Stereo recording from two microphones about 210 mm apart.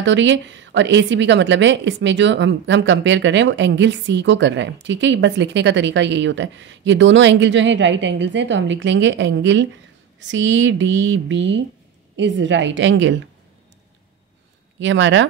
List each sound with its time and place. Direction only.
0.0 s a woman's voice: 60° right (ahead or behind)
14.8 s a woman's voice: 60° right (ahead or behind)